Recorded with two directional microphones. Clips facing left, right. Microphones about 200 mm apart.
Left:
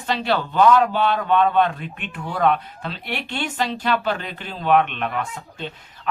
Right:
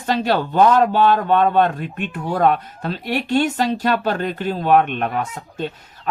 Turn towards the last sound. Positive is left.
turn(degrees=-40)  # may be behind; listen again after turning